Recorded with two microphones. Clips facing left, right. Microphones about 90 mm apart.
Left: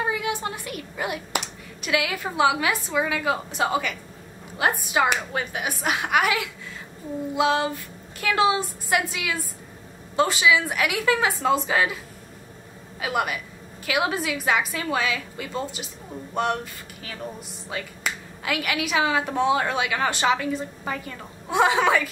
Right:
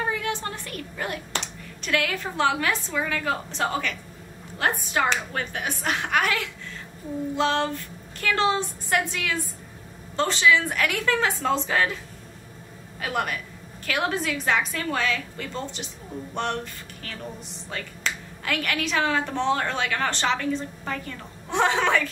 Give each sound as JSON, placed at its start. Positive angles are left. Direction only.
{"t": 0.0, "sound": "a woman's voice", "side_deg": 10}
{"t": 13.0, "sound": "speech", "side_deg": 5}